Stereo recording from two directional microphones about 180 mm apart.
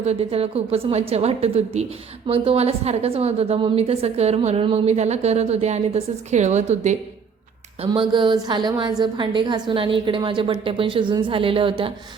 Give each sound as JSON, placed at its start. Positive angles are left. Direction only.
{"t": 0.0, "sound": "a woman's voice", "side_deg": -35}
{"t": 7.9, "sound": "a woman's voice", "side_deg": -25}